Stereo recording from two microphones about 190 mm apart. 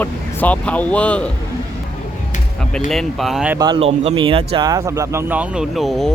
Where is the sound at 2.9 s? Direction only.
Centre (ahead or behind).